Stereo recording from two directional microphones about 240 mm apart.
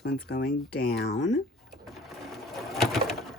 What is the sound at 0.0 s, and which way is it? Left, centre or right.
Speech, left.